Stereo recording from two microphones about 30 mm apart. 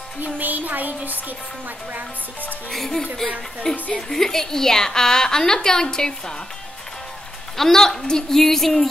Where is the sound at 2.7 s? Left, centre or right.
Centre.